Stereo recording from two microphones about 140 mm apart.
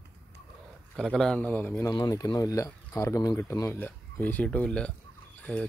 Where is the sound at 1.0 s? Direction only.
5° left (ahead or behind).